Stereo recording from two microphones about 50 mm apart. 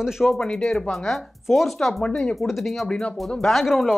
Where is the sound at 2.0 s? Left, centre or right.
Centre.